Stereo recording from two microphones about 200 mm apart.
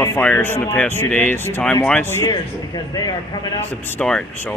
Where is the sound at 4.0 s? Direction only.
5° left (ahead or behind).